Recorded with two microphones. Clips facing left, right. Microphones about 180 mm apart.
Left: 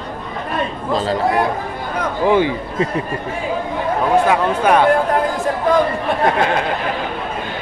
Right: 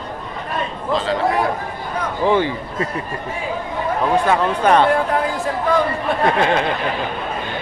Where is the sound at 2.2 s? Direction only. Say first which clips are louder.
Left 2 dB; 15° left (ahead or behind).